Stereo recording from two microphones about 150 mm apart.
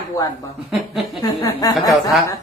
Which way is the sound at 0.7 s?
Centre (ahead or behind).